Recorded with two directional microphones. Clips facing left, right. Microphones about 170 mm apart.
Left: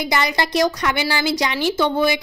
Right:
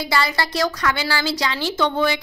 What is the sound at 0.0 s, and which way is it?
A woman's voice, 15° left (ahead or behind).